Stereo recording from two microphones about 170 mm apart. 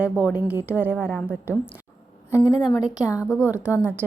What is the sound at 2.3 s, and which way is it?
Speech, 20° left (ahead or behind).